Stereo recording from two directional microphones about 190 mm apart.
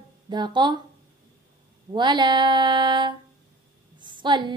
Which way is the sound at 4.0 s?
25° right (ahead or behind).